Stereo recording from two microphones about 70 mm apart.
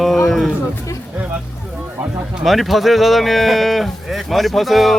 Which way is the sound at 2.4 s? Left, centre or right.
Centre.